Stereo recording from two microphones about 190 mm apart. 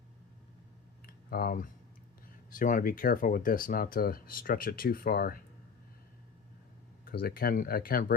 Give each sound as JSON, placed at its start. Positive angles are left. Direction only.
{"t": 1.0, "sound": "a sound", "side_deg": 50}
{"t": 2.5, "sound": "speech", "side_deg": 45}
{"t": 7.0, "sound": "speech", "side_deg": 55}